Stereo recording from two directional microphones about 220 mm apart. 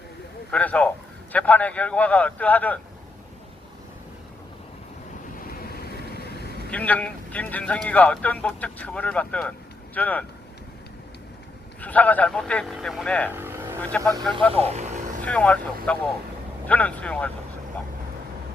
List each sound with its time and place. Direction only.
0.5 s a man's voice: 5° left (ahead or behind)
6.7 s a man's voice: 5° left (ahead or behind)
11.8 s speech: 5° left (ahead or behind)
13.3 s vehicle: 10° right (ahead or behind)
13.9 s speech: 5° left (ahead or behind)
14.5 s speech: 30° right (ahead or behind)
15.2 s a man's voice: 5° left (ahead or behind)